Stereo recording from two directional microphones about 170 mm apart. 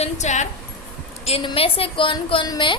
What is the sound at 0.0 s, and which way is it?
Speech, 45° left (ahead or behind).